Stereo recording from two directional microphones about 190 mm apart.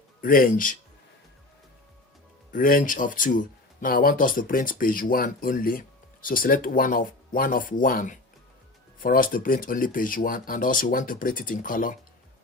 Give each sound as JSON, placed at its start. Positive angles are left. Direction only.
{"t": 0.2, "sound": "speech", "side_deg": 45}
{"t": 2.5, "sound": "speech", "side_deg": 45}